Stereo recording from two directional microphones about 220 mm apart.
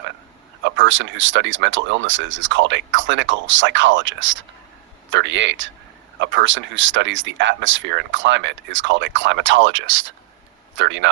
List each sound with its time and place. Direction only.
0.6 s speech: 60° right (ahead or behind)